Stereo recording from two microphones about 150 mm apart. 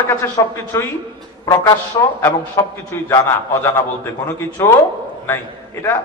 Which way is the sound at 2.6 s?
20° left (ahead or behind).